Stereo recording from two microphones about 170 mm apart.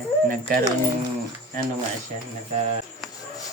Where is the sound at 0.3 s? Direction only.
55° right (ahead or behind).